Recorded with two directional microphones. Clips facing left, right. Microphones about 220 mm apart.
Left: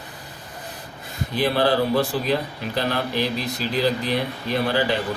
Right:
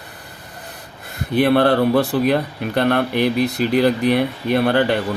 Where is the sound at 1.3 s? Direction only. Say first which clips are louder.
Right 6 dB; 60° right (ahead or behind).